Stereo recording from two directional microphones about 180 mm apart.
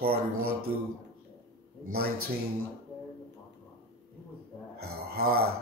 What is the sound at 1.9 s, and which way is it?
Speech, 55° right (ahead or behind).